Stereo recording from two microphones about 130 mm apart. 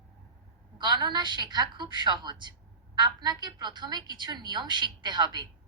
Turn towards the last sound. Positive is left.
turn(degrees=-35)  # may be behind; listen again after turning